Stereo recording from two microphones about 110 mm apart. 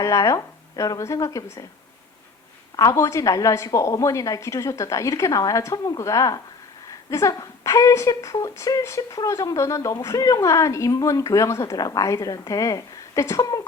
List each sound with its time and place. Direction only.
0.0 s a woman's voice: 30° left (ahead or behind)
2.7 s a woman's voice: 30° left (ahead or behind)